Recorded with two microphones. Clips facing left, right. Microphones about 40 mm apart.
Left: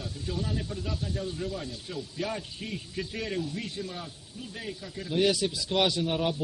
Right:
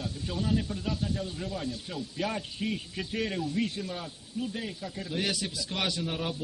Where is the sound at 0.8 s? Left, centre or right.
Right.